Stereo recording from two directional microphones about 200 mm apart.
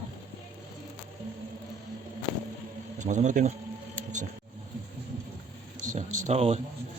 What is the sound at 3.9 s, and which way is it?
Scissors, 35° right (ahead or behind).